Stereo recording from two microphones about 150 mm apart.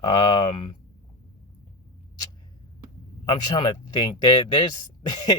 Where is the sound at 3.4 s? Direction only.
30° left (ahead or behind).